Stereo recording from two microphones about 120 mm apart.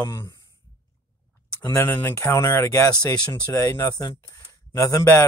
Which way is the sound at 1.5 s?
25° left (ahead or behind).